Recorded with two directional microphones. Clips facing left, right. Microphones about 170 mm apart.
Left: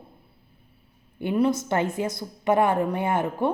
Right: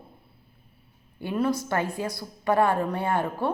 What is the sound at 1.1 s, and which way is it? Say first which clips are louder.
A woman's voice: left 3 dB; 20° left (ahead or behind).